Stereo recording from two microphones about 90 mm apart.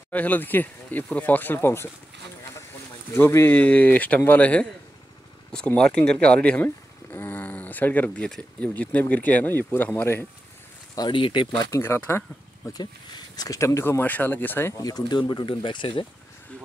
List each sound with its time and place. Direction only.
0.1 s speech: 20° left (ahead or behind)
3.1 s speech: 30° left (ahead or behind); by 4.6 s 15° left (ahead or behind)
5.8 s speech: 10° left (ahead or behind)
11.0 s speech: 65° left (ahead or behind)
11.7 s speech: 30° left (ahead or behind)
12.7 s speech: 45° left (ahead or behind)
13.6 s speech: 35° left (ahead or behind)
14.7 s speech: 45° left (ahead or behind); by 16.1 s 65° left (ahead or behind)